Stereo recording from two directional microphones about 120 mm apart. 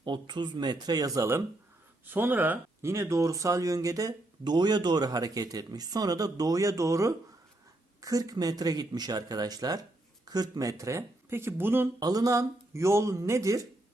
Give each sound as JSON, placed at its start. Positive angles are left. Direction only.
{"t": 0.0, "sound": "speech", "side_deg": -40}
{"t": 2.0, "sound": "speech", "side_deg": -15}
{"t": 11.9, "sound": "speech", "side_deg": -30}